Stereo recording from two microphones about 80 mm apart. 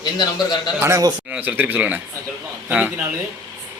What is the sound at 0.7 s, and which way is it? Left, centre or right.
Speech, right.